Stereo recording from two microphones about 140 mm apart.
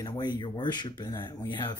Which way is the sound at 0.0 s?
30° left (ahead or behind).